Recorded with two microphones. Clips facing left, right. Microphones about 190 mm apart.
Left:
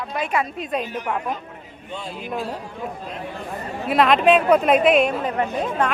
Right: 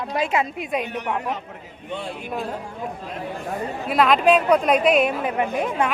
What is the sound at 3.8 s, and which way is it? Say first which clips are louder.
A man's voice: left 1 dB; centre (ahead or behind).